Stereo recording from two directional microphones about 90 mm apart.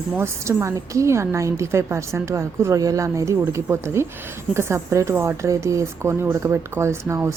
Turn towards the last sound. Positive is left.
turn(degrees=-30)  # may be behind; listen again after turning